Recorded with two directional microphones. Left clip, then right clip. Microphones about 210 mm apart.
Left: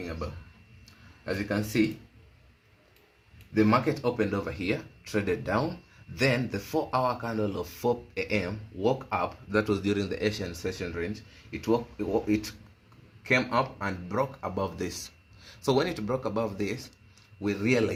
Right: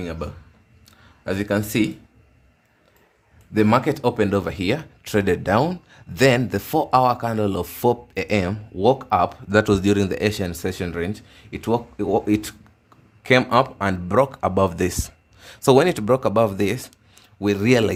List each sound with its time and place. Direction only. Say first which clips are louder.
1.2 s speech: right 8 dB; 55° right (ahead or behind)
3.5 s speech: right 6 dB; 60° right (ahead or behind)